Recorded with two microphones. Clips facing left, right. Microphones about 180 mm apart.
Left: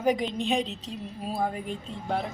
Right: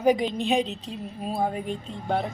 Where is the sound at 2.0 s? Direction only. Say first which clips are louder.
Right 3 dB; centre (ahead or behind).